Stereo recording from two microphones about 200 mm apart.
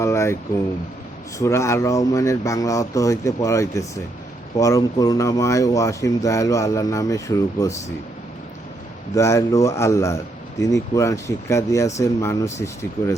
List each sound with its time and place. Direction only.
0.0 s speech: 15° left (ahead or behind)
9.1 s speech: 15° left (ahead or behind)